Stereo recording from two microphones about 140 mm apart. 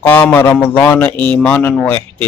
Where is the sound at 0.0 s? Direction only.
10° left (ahead or behind).